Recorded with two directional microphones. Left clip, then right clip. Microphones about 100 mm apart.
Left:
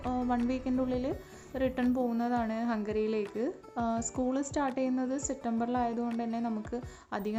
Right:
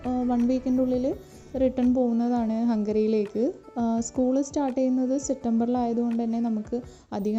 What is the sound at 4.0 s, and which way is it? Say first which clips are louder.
Music: right 7 dB; centre (ahead or behind).